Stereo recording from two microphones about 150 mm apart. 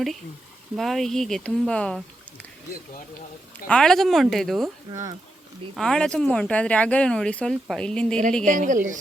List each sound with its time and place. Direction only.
0.8 s speech: centre (ahead or behind)
3.7 s speech: 5° left (ahead or behind)
4.9 s speech: 25° right (ahead or behind)
5.7 s speech: 5° left (ahead or behind)
8.4 s speech: 60° right (ahead or behind)